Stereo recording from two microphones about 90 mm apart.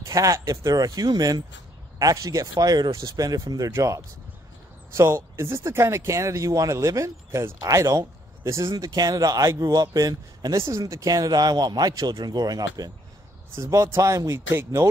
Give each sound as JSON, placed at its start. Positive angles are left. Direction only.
{"t": 0.0, "sound": "speech", "side_deg": -35}
{"t": 8.7, "sound": "speech", "side_deg": -45}